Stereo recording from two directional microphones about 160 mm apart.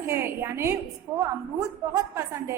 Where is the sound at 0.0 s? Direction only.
15° right (ahead or behind).